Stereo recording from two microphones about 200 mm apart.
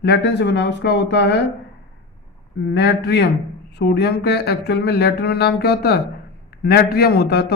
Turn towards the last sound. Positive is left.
turn(degrees=55)  # may be behind; listen again after turning